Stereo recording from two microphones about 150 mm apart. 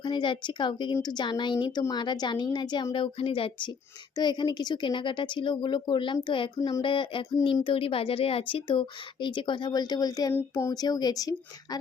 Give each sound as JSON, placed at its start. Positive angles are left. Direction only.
{"t": 0.0, "sound": "a woman's voice", "side_deg": 35}